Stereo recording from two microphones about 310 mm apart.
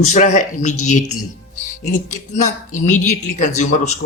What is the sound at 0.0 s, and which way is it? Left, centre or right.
Speech, left.